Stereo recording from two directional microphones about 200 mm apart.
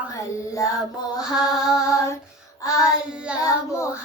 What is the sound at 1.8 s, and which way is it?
Child singing, 15° left (ahead or behind).